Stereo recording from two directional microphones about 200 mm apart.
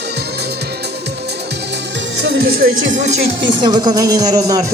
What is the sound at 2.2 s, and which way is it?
Music, 55° right (ahead or behind).